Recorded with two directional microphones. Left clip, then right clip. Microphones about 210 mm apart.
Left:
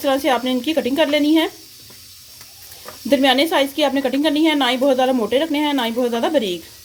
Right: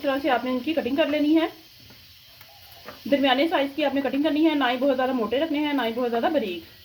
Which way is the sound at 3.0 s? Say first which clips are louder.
Left 6 dB; 45° left (ahead or behind).